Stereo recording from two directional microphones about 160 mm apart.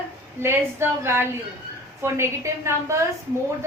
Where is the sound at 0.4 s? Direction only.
15° right (ahead or behind).